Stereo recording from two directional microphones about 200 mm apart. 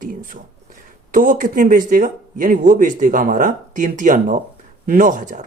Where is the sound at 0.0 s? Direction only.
40° right (ahead or behind).